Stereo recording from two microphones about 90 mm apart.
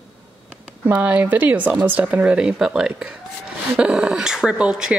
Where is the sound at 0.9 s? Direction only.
15° right (ahead or behind).